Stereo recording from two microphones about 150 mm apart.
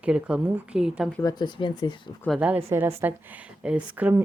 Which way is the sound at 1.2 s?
30° left (ahead or behind).